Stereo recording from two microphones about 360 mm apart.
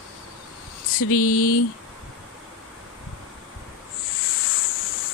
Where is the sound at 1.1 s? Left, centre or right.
Left.